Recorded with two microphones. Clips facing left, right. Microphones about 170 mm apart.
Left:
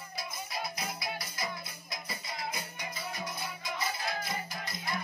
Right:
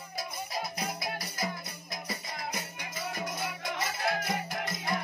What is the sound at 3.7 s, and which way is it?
Music, 85° right.